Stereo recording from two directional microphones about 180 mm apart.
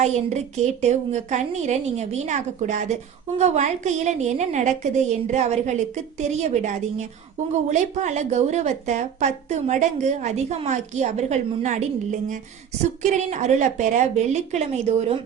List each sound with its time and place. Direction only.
0.0 s speech: 40° right (ahead or behind)
13.0 s speech: 40° right (ahead or behind)